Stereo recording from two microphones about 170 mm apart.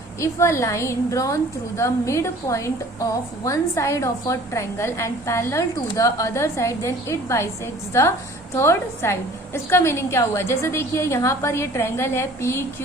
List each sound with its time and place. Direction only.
0.2 s a woman's voice: 15° left (ahead or behind)
8.5 s a woman's voice: 15° left (ahead or behind)